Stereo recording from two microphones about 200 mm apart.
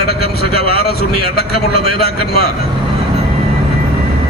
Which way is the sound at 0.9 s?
50° left (ahead or behind).